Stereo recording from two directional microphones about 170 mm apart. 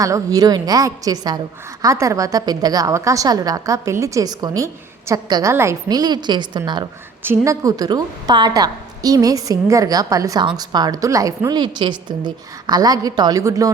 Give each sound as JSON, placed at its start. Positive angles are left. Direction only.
{"t": 0.0, "sound": "a woman's voice", "side_deg": -20}
{"t": 7.2, "sound": "a woman's voice", "side_deg": -15}